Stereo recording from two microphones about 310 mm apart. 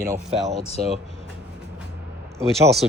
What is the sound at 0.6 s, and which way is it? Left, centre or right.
Speech, centre.